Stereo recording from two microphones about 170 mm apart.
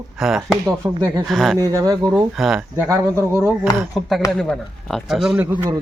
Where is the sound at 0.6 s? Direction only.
25° right (ahead or behind).